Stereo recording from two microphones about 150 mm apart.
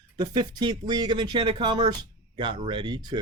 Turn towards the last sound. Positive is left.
turn(degrees=-30)  # may be behind; listen again after turning